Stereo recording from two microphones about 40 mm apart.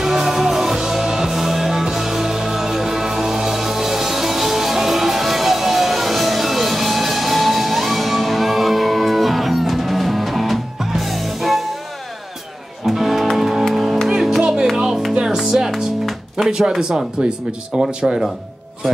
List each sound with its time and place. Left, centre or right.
0.0 s music: centre
12.8 s music: centre
16.4 s speech: centre